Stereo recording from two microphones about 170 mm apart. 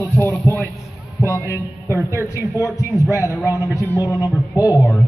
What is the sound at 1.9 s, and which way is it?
Speech, 15° right (ahead or behind).